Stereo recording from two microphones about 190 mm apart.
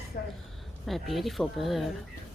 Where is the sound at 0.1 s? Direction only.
50° left (ahead or behind).